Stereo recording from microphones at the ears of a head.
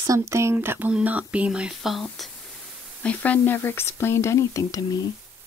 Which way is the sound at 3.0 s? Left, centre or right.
Left.